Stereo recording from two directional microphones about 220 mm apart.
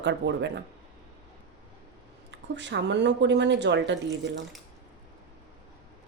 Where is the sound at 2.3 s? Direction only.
55° right (ahead or behind).